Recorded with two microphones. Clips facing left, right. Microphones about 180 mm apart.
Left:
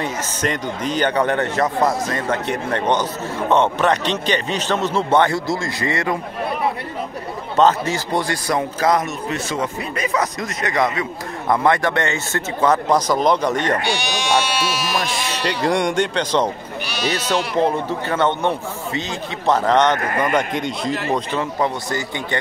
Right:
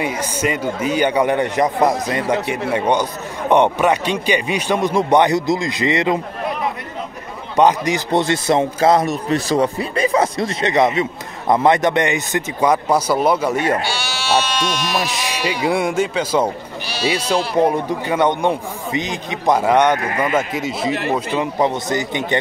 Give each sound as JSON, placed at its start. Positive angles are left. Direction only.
{"t": 0.0, "sound": "a man's voice", "side_deg": -10}
{"t": 7.5, "sound": "a man's voice", "side_deg": -15}
{"t": 13.8, "sound": "speech", "side_deg": 20}
{"t": 15.0, "sound": "a man's voice", "side_deg": -15}
{"t": 16.8, "sound": "speech", "side_deg": -30}
{"t": 17.6, "sound": "a man's voice", "side_deg": -15}